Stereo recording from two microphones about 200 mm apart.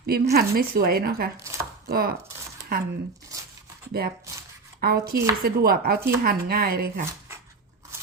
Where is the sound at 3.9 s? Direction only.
50° right (ahead or behind).